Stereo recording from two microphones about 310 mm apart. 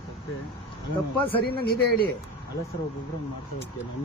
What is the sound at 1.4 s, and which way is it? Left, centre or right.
Speech, left.